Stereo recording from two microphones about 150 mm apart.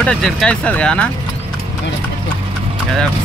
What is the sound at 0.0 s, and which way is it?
Speech, 5° left (ahead or behind).